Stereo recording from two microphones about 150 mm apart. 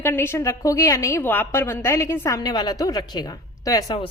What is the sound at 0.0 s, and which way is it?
A woman's voice, 15° left (ahead or behind).